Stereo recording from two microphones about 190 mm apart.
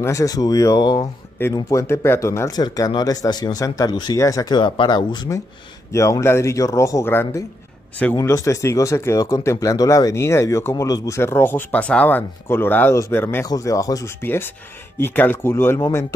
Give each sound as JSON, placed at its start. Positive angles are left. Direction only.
{"t": 0.0, "sound": "speech", "side_deg": 15}